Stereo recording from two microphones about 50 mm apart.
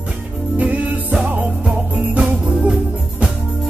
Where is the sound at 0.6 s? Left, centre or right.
Right.